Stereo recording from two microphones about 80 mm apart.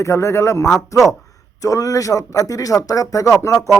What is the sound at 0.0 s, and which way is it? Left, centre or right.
A man's voice, left.